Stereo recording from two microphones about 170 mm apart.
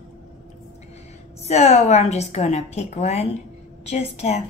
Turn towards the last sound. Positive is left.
turn(degrees=40)  # may be behind; listen again after turning